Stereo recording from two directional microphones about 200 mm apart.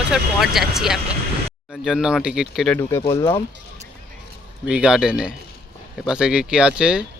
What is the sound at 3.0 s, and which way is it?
Speech, 25° left (ahead or behind).